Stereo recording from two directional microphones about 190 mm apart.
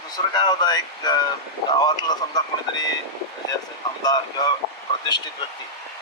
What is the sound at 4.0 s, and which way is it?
Speech, 20° left (ahead or behind).